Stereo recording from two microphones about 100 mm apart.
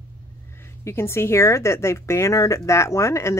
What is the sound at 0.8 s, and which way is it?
Speech, 25° left (ahead or behind).